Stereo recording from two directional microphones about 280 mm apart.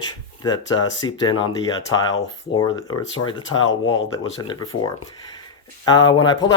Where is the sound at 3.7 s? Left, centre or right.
Left.